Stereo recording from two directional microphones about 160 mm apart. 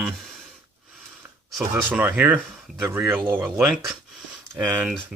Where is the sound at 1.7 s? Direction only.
10° right (ahead or behind).